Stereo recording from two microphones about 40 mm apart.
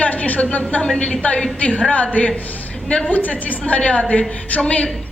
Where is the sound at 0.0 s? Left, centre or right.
Left.